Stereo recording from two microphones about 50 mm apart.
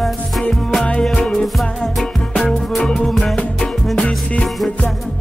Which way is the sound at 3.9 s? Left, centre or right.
Left.